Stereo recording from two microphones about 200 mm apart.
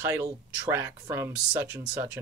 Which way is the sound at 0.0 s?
10° right (ahead or behind).